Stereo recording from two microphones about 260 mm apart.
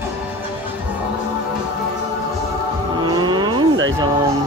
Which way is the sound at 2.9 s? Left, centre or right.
Centre.